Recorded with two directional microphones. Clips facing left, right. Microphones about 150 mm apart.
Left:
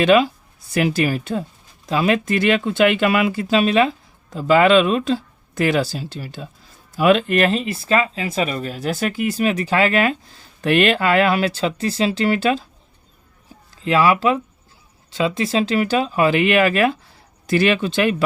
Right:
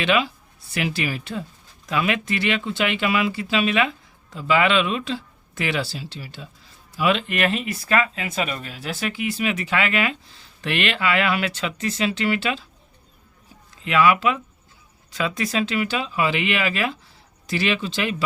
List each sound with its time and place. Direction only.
0.0 s speech: 40° left (ahead or behind)
13.8 s speech: 35° left (ahead or behind); by 18.2 s 55° left (ahead or behind)